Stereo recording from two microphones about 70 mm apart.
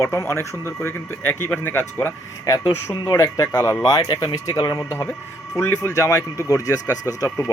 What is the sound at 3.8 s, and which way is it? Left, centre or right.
Speech, left.